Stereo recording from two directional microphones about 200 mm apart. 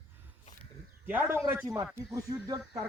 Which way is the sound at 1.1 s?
10° right (ahead or behind).